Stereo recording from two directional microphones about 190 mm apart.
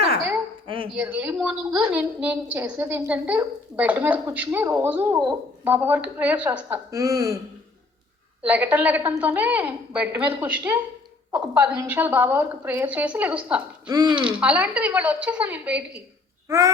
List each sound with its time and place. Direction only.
0.9 s a woman's voice: 5° right (ahead or behind)
6.9 s a woman's voice: 15° right (ahead or behind)
8.4 s a woman's voice: 10° right (ahead or behind)
13.9 s speech: 20° right (ahead or behind)
14.2 s a woman's voice: 5° right (ahead or behind)